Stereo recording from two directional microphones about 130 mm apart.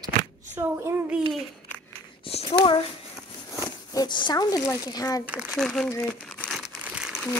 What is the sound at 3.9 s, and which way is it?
Speech, 35° left (ahead or behind).